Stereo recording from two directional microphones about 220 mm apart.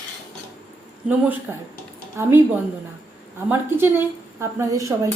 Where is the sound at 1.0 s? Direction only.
5° right (ahead or behind).